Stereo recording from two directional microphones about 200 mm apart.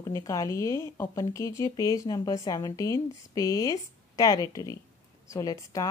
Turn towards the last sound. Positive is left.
turn(degrees=15)  # may be behind; listen again after turning